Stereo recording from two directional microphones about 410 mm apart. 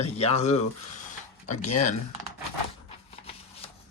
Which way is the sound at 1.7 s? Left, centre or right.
Left.